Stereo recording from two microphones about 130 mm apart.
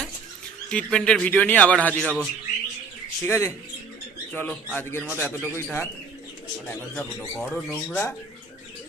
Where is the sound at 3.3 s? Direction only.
20° left (ahead or behind).